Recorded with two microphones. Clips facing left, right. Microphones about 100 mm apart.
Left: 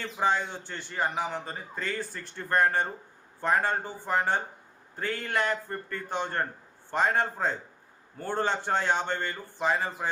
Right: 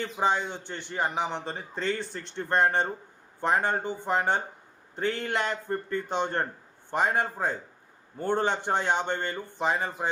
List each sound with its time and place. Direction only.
0.0 s a man's voice: 20° right (ahead or behind)